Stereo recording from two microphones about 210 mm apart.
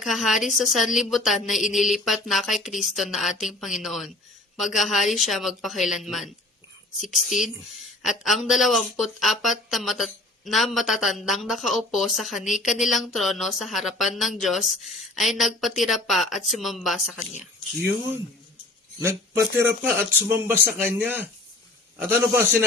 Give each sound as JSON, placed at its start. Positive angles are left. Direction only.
{"t": 0.0, "sound": "speech", "side_deg": 0}
{"t": 19.5, "sound": "speech", "side_deg": -10}